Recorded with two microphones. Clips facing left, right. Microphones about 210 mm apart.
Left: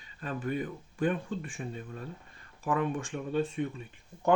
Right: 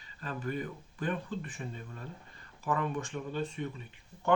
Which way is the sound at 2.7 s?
50° left (ahead or behind).